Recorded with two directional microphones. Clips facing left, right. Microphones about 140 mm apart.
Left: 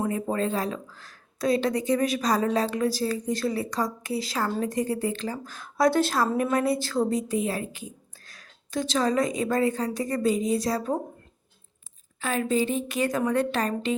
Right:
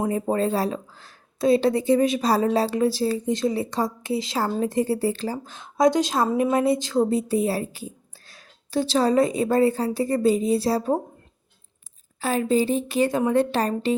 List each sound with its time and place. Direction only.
0.0 s a woman's voice: 30° right (ahead or behind)
12.2 s a woman's voice: 30° right (ahead or behind)